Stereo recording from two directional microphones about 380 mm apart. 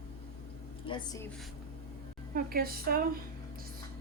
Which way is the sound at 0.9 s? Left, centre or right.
Centre.